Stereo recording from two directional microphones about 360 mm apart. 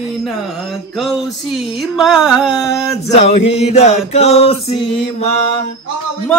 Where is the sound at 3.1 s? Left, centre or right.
Centre.